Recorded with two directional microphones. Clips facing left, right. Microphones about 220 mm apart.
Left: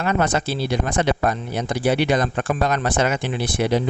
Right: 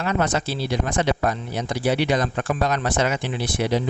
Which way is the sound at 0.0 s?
55° left (ahead or behind).